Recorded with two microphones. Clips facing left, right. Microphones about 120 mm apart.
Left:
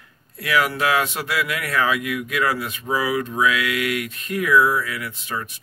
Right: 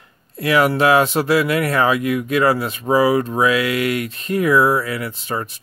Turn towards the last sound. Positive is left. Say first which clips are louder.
# right 5 dB
turn(degrees=-35)  # may be behind; listen again after turning